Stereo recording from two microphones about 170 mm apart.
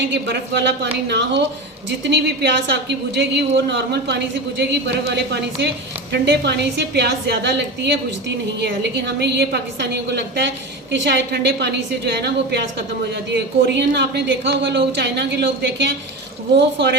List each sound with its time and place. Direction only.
0.0 s a woman's voice: 90° right
2.0 s a woman's voice: 85° right
13.3 s a woman's voice: 90° right
16.6 s speech: 90° right